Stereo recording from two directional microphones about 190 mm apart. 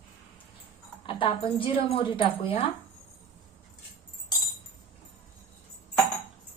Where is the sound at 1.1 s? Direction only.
25° left (ahead or behind).